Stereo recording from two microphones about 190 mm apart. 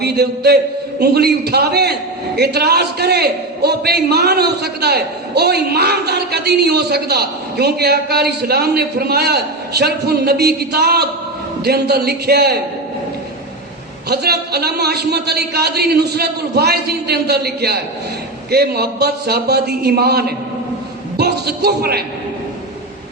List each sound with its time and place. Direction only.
0.0 s a man's voice: 60° right (ahead or behind)
14.1 s a man's voice: 55° right (ahead or behind)